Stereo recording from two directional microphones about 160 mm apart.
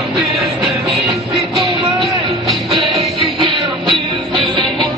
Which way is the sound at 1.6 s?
35° right (ahead or behind).